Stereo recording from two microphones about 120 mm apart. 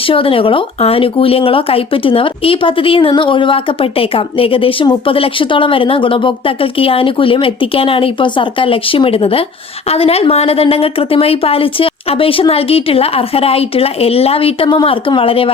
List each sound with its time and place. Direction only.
0.1 s speech: 50° left (ahead or behind)